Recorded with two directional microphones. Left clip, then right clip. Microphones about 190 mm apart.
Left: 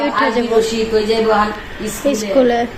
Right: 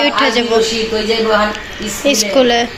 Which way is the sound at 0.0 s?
5° left (ahead or behind).